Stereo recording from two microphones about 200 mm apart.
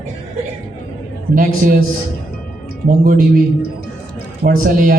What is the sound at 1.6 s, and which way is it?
Speech, 45° right (ahead or behind).